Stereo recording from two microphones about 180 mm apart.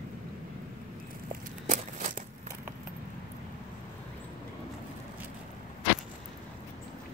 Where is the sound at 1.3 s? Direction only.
45° right (ahead or behind).